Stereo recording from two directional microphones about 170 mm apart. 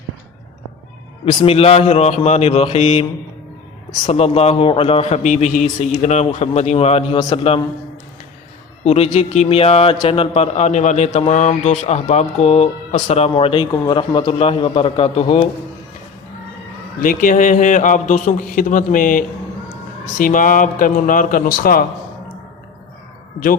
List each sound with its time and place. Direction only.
1.2 s a man's voice: 30° left (ahead or behind)
8.8 s a man's voice: 40° left (ahead or behind)
17.0 s a man's voice: 50° left (ahead or behind)